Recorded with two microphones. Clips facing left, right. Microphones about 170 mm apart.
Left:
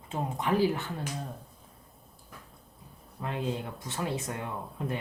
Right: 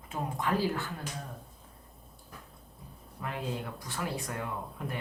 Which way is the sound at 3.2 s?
25° left (ahead or behind).